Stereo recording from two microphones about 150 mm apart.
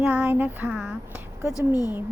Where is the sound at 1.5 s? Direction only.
25° left (ahead or behind).